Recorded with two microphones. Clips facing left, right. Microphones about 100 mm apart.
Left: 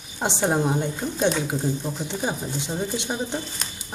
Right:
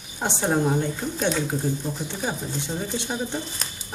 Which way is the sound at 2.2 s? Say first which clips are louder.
Even; 15° left (ahead or behind).